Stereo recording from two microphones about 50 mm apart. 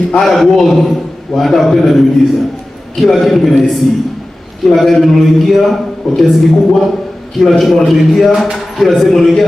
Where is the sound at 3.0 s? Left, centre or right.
Centre.